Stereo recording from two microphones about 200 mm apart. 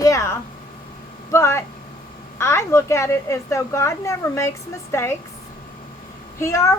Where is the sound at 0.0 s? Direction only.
15° left (ahead or behind).